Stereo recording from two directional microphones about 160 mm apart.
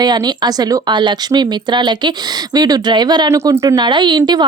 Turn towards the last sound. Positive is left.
turn(degrees=-25)  # may be behind; listen again after turning